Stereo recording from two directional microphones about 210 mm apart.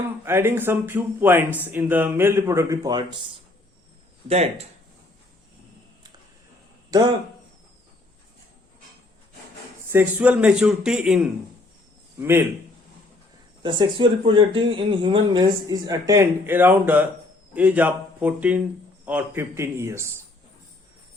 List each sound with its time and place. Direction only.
0.3 s speech: 10° right (ahead or behind)
4.3 s speech: 30° right (ahead or behind)
6.9 s speech: 15° right (ahead or behind)
9.9 s a man's voice: 10° right (ahead or behind)
13.6 s speech: 20° right (ahead or behind)